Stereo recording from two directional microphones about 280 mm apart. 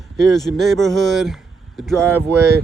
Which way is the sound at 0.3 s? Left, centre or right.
Centre.